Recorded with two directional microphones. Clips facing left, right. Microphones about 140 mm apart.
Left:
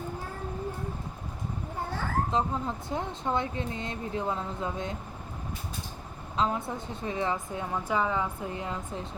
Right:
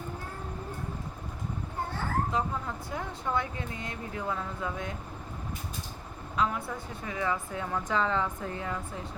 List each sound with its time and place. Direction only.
2.3 s speech: 25° left (ahead or behind)
6.3 s speech: 25° left (ahead or behind)